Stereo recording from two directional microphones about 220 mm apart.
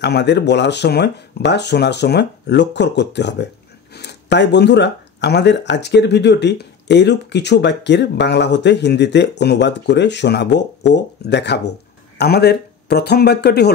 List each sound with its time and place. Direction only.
0.0 s speech: 50° left (ahead or behind)